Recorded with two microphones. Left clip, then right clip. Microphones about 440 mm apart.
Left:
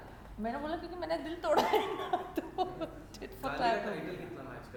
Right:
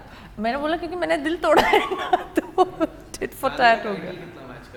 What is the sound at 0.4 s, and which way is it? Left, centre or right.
A woman's voice, right.